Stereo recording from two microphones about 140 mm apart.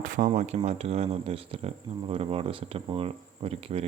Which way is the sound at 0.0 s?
70° right (ahead or behind).